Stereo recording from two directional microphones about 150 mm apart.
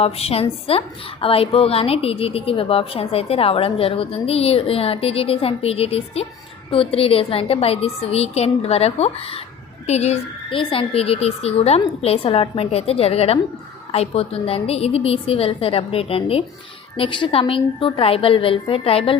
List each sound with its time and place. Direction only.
0.0 s a woman's voice: 40° left (ahead or behind)